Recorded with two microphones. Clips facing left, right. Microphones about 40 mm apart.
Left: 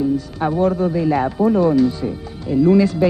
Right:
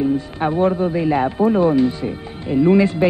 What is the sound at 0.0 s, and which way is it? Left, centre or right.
Speech, right.